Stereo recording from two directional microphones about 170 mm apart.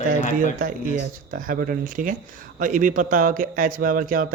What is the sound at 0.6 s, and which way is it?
Speech, 55° right (ahead or behind).